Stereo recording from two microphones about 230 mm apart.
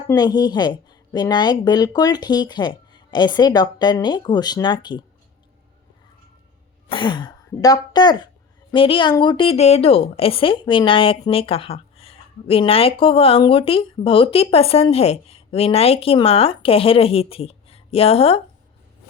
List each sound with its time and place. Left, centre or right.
0.1 s a woman's voice: centre
6.8 s a woman's voice: left